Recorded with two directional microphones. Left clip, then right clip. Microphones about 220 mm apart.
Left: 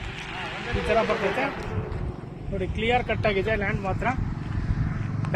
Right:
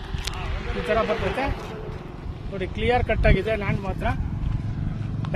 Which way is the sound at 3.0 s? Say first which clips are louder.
Right 2 dB; 45° right (ahead or behind).